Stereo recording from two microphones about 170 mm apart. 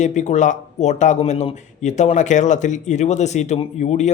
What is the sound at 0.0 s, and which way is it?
Speech, 45° left (ahead or behind).